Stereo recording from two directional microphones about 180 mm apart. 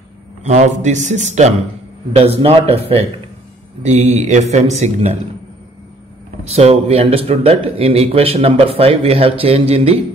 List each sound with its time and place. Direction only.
0.4 s speech: 40° right (ahead or behind)
3.8 s speech: 40° right (ahead or behind)
6.4 s speech: 35° right (ahead or behind)